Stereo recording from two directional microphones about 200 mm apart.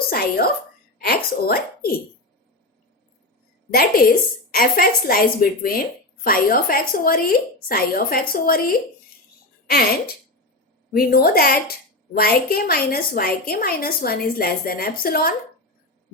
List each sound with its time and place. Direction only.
0.1 s speech: 50° left (ahead or behind)
3.7 s a woman's voice: 50° left (ahead or behind)
10.9 s a woman's voice: 50° left (ahead or behind)